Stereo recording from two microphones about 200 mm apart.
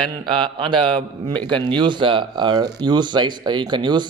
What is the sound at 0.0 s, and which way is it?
Speech, 25° right (ahead or behind).